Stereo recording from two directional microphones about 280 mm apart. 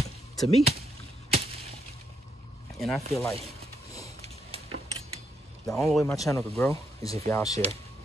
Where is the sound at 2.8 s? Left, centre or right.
Centre.